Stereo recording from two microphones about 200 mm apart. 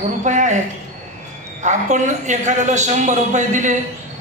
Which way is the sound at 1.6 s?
35° right (ahead or behind).